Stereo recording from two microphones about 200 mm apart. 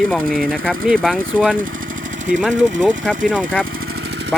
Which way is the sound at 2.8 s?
5° right (ahead or behind).